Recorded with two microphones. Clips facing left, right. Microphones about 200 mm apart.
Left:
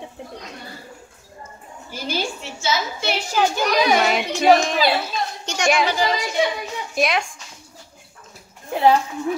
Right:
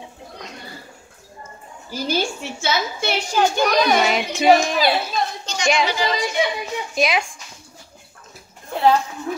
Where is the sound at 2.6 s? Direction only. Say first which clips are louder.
Right 1 dB; 60° right (ahead or behind).